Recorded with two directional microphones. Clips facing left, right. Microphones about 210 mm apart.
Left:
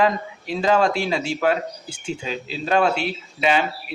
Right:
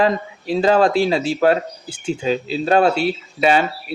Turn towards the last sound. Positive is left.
turn(degrees=-40)  # may be behind; listen again after turning